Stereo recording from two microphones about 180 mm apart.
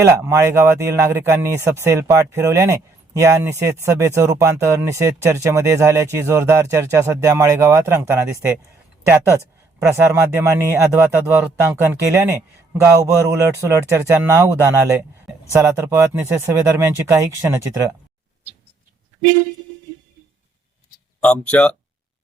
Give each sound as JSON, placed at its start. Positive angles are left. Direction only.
{"t": 0.0, "sound": "speech", "side_deg": -15}
{"t": 21.2, "sound": "speech", "side_deg": 5}